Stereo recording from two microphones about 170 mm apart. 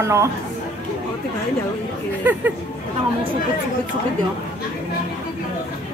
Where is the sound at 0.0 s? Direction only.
15° right (ahead or behind).